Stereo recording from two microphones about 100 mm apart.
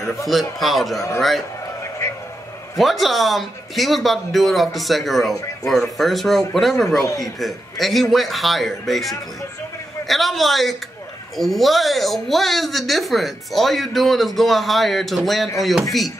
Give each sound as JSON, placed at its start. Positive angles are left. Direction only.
{"t": 0.3, "sound": "speech", "side_deg": 0}
{"t": 2.8, "sound": "speech", "side_deg": 0}